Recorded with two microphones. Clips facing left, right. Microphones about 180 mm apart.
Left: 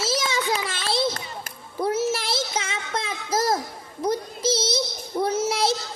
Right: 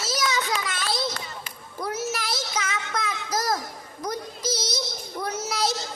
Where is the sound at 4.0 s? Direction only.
25° left (ahead or behind).